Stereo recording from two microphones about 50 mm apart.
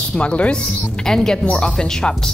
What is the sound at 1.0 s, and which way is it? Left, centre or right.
Speech, centre.